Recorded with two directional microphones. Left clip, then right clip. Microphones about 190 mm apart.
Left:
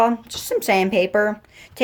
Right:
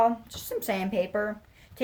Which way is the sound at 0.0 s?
35° left (ahead or behind).